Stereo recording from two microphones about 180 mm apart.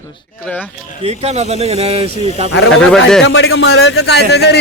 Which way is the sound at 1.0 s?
35° right (ahead or behind).